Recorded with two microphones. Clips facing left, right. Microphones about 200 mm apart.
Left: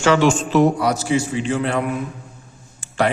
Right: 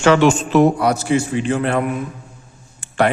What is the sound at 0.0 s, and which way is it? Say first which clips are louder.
A man's voice: right 3 dB; 55° right (ahead or behind).